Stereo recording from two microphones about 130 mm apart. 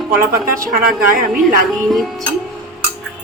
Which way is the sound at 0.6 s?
90° right.